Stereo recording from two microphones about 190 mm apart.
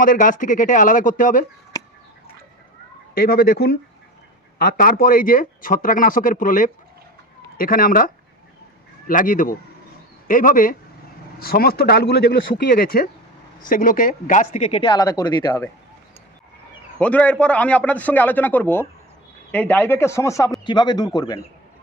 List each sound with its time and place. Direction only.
0.0 s speech: 45° left (ahead or behind)
3.2 s speech: 55° left (ahead or behind); by 15.6 s 25° left (ahead or behind)
17.0 s a man's voice: 5° left (ahead or behind)